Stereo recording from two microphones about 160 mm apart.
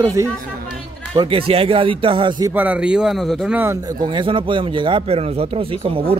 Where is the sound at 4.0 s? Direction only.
30° right (ahead or behind).